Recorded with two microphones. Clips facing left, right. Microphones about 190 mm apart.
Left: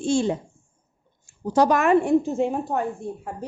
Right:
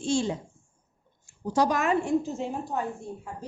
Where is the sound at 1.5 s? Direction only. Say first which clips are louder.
Left 6 dB; 60° left (ahead or behind).